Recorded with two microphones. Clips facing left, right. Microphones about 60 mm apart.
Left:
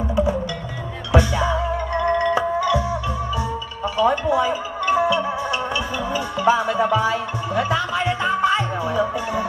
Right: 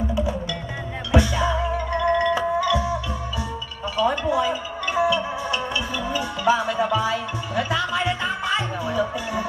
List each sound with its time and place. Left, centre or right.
1.1 s music: left
3.9 s music: left